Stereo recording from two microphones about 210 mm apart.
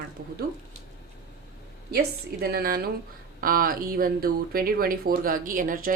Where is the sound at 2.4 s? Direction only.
45° right (ahead or behind).